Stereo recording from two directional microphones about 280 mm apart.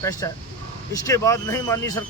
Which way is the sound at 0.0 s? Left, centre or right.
Centre.